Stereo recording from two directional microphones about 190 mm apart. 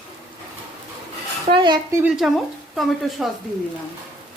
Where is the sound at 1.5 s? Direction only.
25° right (ahead or behind).